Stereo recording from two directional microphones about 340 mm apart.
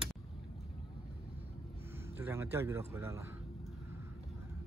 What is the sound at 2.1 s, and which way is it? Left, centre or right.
Speech, centre.